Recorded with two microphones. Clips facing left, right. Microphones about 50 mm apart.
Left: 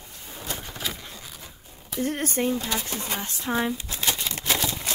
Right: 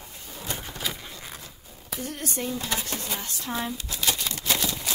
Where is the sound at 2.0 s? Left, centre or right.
Left.